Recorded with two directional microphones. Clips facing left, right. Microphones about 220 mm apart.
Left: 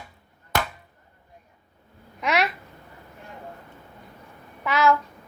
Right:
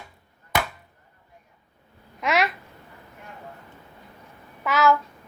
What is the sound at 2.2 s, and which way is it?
Speech, centre (ahead or behind).